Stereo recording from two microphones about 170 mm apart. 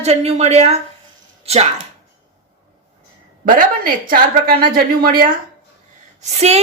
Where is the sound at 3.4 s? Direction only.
55° right (ahead or behind).